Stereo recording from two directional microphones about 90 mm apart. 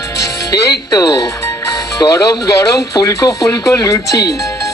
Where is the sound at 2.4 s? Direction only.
35° left (ahead or behind).